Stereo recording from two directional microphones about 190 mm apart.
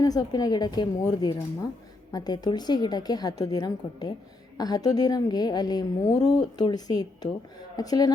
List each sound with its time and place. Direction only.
0.0 s a woman's voice: 20° left (ahead or behind)